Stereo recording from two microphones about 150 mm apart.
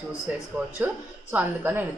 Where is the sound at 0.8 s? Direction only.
10° right (ahead or behind).